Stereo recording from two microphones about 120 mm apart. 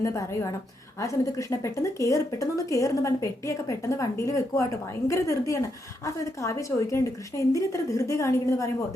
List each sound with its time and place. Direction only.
0.0 s speech: 25° left (ahead or behind)